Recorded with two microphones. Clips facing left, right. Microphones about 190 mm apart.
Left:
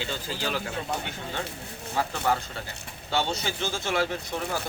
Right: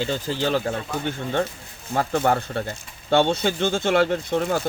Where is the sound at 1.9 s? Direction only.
50° right (ahead or behind).